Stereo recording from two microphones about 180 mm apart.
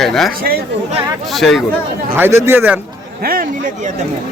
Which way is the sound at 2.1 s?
10° right (ahead or behind).